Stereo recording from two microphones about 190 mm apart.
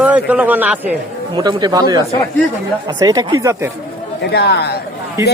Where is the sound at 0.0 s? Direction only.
5° right (ahead or behind).